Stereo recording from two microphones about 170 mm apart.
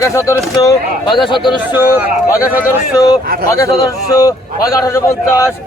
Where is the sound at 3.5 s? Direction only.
20° left (ahead or behind).